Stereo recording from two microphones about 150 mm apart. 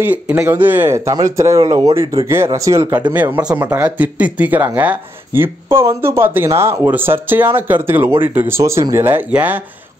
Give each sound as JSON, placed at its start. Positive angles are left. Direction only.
{"t": 0.0, "sound": "speech", "side_deg": -10}